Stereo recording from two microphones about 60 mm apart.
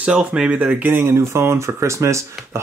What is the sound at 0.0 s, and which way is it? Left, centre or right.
Speech, centre.